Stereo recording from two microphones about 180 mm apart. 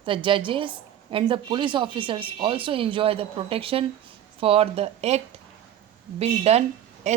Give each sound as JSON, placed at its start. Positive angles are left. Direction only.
{"t": 0.0, "sound": "a woman's voice", "side_deg": -30}